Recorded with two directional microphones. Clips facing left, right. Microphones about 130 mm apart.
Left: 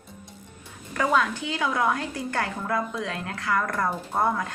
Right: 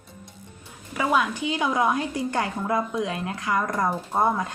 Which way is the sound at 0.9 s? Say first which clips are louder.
Even; 10° right (ahead or behind).